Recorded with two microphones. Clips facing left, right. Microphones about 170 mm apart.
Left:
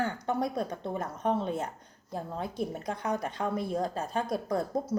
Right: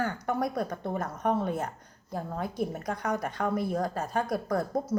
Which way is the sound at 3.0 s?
25° left (ahead or behind).